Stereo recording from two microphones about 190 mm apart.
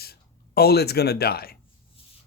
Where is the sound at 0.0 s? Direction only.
55° left (ahead or behind).